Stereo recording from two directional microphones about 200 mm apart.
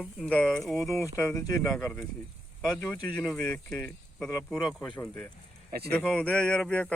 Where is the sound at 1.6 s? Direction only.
5° left (ahead or behind).